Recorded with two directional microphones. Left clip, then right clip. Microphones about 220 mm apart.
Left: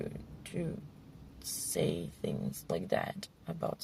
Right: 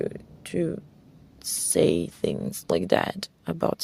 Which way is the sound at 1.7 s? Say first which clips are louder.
Right 13 dB; 40° right (ahead or behind).